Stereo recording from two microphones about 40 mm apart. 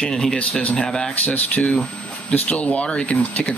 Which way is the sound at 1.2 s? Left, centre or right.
Left.